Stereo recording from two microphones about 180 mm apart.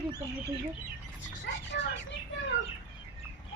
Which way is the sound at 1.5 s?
80° left.